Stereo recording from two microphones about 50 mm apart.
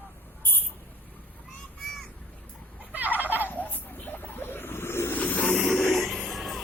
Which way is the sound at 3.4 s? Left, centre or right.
Left.